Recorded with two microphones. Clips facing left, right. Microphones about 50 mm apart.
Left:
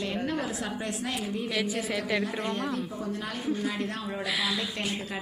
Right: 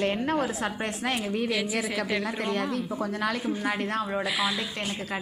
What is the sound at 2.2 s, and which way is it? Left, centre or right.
A woman's voice, right.